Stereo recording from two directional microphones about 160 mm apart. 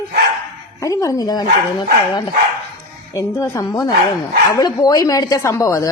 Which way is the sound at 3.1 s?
20° left (ahead or behind).